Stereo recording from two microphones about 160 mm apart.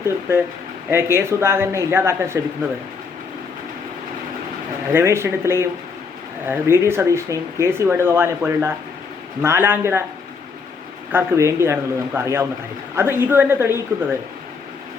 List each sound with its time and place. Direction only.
0.0 s speech: 15° right (ahead or behind)
4.9 s speech: 15° right (ahead or behind)
11.1 s speech: 15° right (ahead or behind)